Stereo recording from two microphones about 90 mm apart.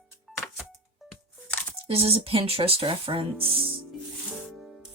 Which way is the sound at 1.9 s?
90° right.